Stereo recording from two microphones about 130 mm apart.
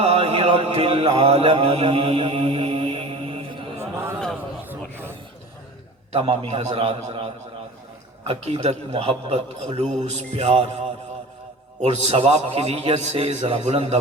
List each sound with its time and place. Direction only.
0.3 s mantra: 55° right (ahead or behind)
1.6 s a man's voice: 55° right (ahead or behind)
2.2 s mantra: 50° right (ahead or behind)
3.9 s a sound: 20° right (ahead or behind)
6.1 s a man's voice: 50° right (ahead or behind)
11.8 s a man's voice: 55° right (ahead or behind)